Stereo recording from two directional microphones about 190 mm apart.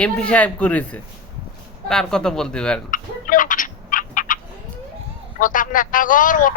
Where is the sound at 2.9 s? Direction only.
45° left (ahead or behind).